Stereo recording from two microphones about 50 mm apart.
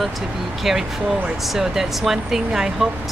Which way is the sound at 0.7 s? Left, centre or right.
Centre.